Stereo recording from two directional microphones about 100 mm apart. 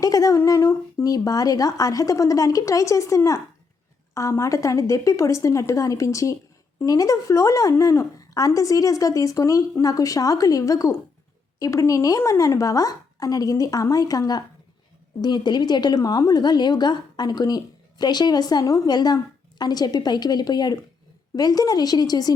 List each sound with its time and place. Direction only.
0.0 s speech: 35° left (ahead or behind)
1.1 s a woman's voice: 35° left (ahead or behind)